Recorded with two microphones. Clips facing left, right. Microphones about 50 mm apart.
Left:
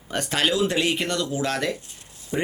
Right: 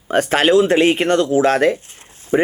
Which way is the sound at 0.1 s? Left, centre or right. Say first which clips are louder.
Right 10 dB; right.